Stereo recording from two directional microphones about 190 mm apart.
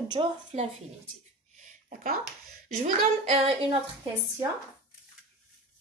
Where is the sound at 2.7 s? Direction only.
40° right (ahead or behind).